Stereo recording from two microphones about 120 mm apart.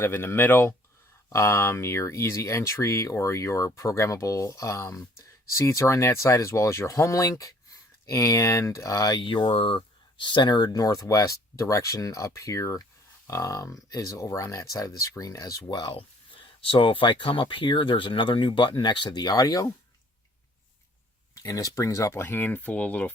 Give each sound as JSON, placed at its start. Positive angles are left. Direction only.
{"t": 0.0, "sound": "speech", "side_deg": 20}
{"t": 21.3, "sound": "speech", "side_deg": 30}